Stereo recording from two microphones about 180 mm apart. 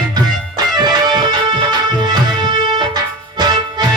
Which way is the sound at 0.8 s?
25° right (ahead or behind).